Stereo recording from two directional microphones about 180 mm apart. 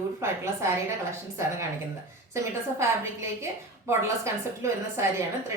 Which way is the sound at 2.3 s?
15° right (ahead or behind).